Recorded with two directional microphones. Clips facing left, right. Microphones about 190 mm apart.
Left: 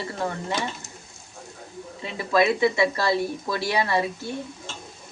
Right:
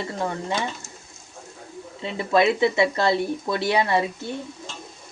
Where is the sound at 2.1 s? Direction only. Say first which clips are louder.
Right 1 dB; 25° right (ahead or behind).